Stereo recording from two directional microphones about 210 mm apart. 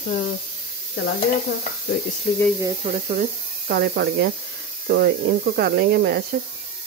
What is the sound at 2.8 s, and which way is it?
Speech, 45° right (ahead or behind).